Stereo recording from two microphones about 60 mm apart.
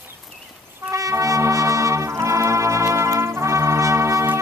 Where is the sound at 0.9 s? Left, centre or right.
Right.